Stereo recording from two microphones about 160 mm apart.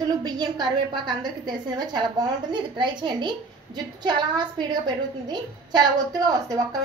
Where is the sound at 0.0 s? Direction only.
25° right (ahead or behind).